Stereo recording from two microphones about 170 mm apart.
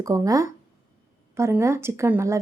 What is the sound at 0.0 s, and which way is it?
Speech, 20° right (ahead or behind).